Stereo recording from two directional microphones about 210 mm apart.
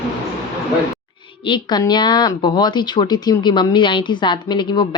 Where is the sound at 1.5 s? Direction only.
20° left (ahead or behind).